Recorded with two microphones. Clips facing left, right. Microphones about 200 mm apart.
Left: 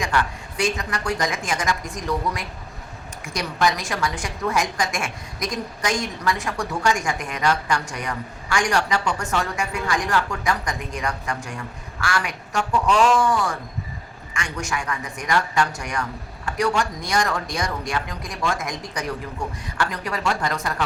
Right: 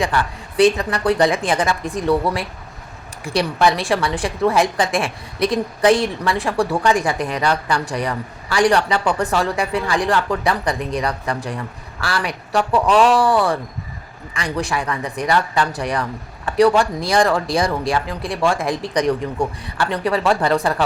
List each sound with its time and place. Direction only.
0.0 s a woman's voice: 35° right (ahead or behind)
3.2 s a woman's voice: 30° right (ahead or behind)